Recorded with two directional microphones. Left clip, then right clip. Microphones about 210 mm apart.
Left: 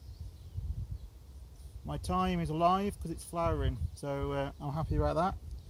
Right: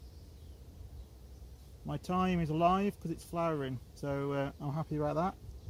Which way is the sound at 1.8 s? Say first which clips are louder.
Left 1 dB; 5° left (ahead or behind).